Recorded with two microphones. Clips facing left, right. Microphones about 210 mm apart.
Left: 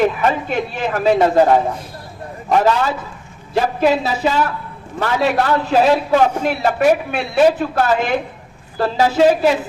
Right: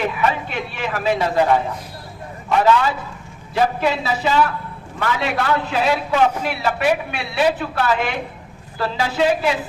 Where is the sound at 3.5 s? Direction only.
40° left (ahead or behind).